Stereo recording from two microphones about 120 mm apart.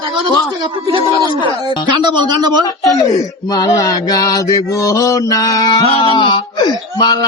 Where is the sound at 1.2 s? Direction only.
40° right (ahead or behind).